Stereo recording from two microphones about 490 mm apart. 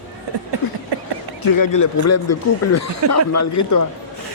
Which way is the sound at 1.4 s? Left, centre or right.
Left.